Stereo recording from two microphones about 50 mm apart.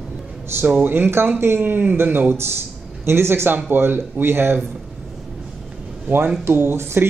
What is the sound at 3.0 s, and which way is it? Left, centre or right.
A man's voice, right.